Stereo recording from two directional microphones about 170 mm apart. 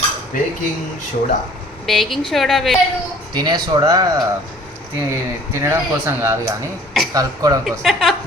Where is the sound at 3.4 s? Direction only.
25° right (ahead or behind).